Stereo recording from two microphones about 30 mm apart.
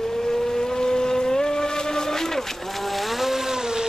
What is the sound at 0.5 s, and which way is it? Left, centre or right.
Vehicle, left.